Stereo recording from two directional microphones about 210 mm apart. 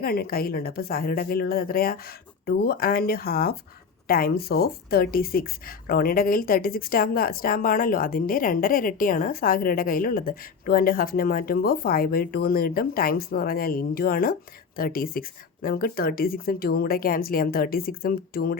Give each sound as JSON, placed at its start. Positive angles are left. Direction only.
{"t": 0.0, "sound": "speech", "side_deg": 45}